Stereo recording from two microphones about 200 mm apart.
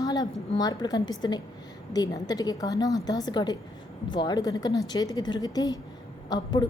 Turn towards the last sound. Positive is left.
turn(degrees=20)  # may be behind; listen again after turning